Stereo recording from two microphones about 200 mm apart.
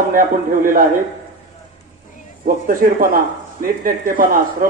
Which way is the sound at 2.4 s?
45° right (ahead or behind).